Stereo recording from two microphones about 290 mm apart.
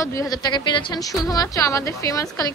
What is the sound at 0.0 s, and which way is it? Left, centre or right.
A woman's voice, centre.